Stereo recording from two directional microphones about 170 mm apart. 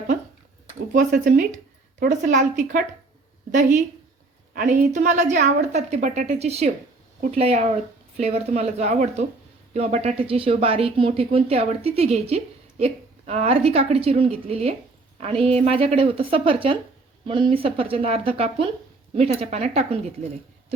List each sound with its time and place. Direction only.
0.9 s a woman's voice: 50° right (ahead or behind)